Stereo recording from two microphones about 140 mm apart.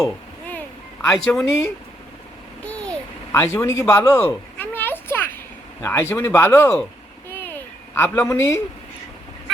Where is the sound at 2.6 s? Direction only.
10° left (ahead or behind).